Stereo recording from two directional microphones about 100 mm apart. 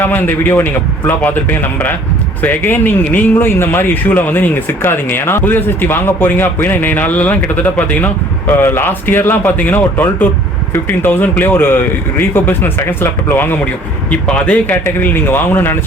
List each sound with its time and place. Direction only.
0.0 s speech: 20° left (ahead or behind)